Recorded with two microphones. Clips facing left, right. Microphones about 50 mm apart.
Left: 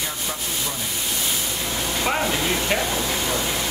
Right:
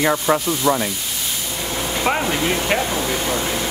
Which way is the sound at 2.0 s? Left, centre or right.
Centre.